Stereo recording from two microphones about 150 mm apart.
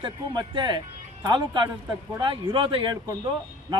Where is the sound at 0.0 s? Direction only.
30° right (ahead or behind).